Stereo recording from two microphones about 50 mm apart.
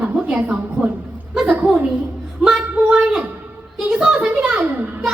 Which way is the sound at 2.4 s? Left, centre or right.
Centre.